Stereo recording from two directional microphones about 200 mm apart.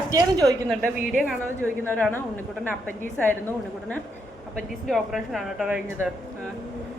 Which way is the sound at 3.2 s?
10° left (ahead or behind).